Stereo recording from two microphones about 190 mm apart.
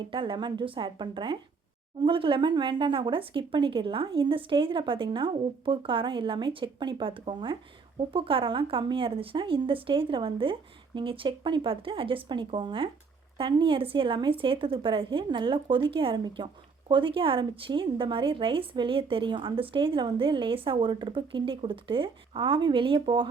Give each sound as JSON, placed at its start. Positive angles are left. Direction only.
{"t": 0.1, "sound": "a woman's voice", "side_deg": -25}